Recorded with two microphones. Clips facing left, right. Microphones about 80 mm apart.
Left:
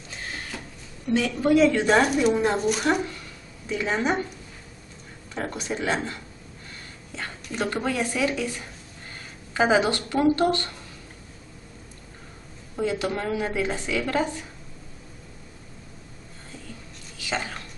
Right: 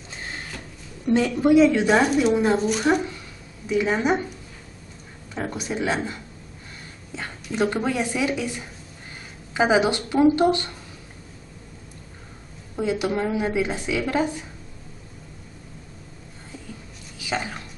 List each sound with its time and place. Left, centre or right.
0.5 s a sound: centre
1.3 s a woman's voice: centre
5.3 s a woman's voice: centre
7.4 s a woman's voice: centre
12.8 s a woman's voice: centre
17.2 s a sound: centre